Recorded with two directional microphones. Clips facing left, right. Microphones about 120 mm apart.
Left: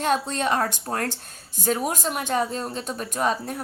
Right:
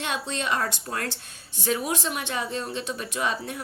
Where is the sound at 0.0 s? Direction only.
45° left (ahead or behind).